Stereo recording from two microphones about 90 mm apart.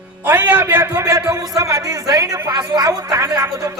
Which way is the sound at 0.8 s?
35° right (ahead or behind).